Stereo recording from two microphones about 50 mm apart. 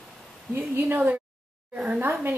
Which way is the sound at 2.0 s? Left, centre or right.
Right.